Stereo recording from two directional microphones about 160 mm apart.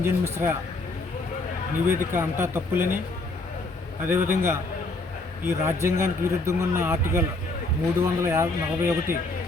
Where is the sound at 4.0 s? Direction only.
15° right (ahead or behind).